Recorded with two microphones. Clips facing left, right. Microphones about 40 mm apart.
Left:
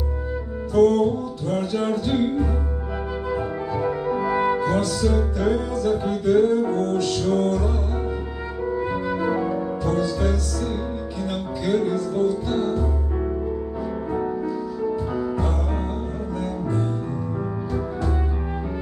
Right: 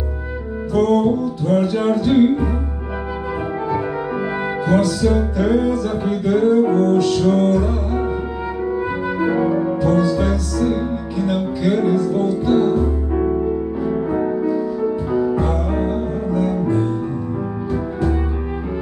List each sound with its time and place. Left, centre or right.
0.7 s music: centre
3.7 s music: right